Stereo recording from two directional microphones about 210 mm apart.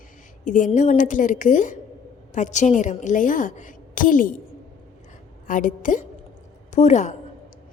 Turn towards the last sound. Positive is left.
turn(degrees=35)  # may be behind; listen again after turning